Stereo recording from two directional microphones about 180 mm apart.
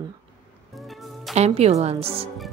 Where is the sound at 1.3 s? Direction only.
35° right (ahead or behind).